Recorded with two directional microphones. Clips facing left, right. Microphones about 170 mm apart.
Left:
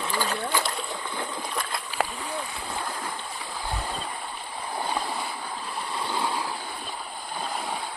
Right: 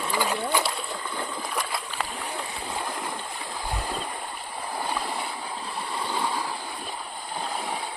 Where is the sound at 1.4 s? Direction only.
5° right (ahead or behind).